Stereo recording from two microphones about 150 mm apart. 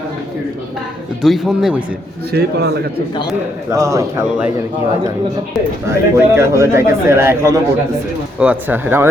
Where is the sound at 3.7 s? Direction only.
20° right (ahead or behind).